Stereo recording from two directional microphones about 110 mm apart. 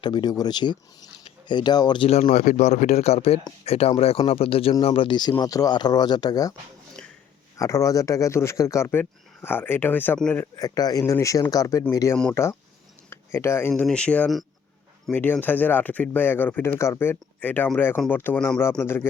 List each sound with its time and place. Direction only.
0.0 s speech: 45° left (ahead or behind)
2.0 s speech: 70° left (ahead or behind)
2.3 s speech: 90° left; by 5.3 s 45° left (ahead or behind)
5.4 s speech: 35° left (ahead or behind)
7.0 s a sound: 5° left (ahead or behind)
7.6 s speech: 30° left (ahead or behind)
10.6 s speech: 35° left (ahead or behind)
13.8 s speech: 10° left (ahead or behind)
18.3 s speech: 5° left (ahead or behind)
18.8 s speech: 20° left (ahead or behind)